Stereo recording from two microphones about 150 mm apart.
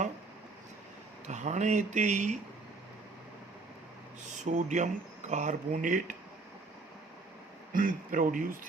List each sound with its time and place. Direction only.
1.3 s speech: 50° right (ahead or behind)
4.3 s speech: 55° right (ahead or behind)
7.7 s speech: 65° right (ahead or behind)